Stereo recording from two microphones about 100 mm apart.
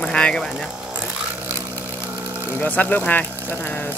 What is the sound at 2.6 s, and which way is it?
Speech, 15° left (ahead or behind).